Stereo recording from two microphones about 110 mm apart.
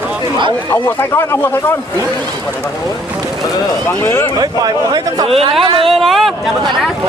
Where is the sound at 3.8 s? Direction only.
20° left (ahead or behind).